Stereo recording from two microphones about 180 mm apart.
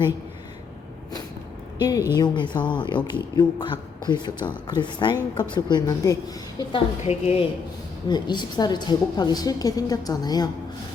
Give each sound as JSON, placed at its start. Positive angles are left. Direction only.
{"t": 1.8, "sound": "a woman's voice", "side_deg": 20}
{"t": 7.1, "sound": "speech", "side_deg": 35}
{"t": 8.0, "sound": "a woman's voice", "side_deg": 25}